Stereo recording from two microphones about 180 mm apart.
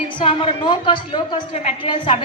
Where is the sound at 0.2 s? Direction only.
25° left (ahead or behind).